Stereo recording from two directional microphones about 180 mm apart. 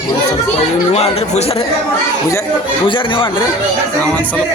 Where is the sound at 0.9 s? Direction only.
35° left (ahead or behind).